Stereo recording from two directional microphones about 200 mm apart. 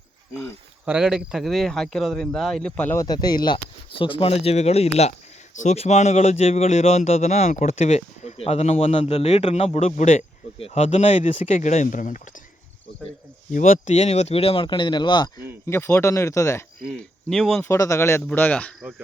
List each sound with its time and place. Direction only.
0.9 s a man's voice: 5° right (ahead or behind); by 12.2 s 40° left (ahead or behind)
13.5 s speech: 40° left (ahead or behind); by 16.6 s 15° left (ahead or behind)
16.8 s speech: centre (ahead or behind)
17.7 s speech: 15° left (ahead or behind)